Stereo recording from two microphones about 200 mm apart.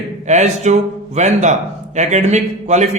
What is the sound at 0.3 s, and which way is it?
A man's voice, 35° right (ahead or behind).